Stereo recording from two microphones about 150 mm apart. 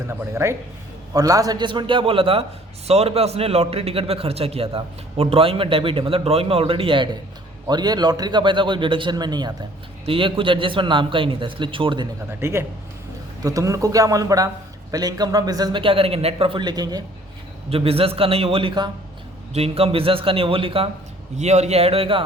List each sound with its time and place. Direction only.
0.1 s a man's voice: 15° right (ahead or behind); by 12.0 s 35° right (ahead or behind)
12.4 s a man's voice: 20° right (ahead or behind)
17.7 s a man's voice: 40° right (ahead or behind)
21.3 s a man's voice: 50° right (ahead or behind)